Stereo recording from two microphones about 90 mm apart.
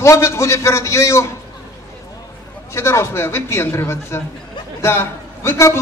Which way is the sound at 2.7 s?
30° left (ahead or behind).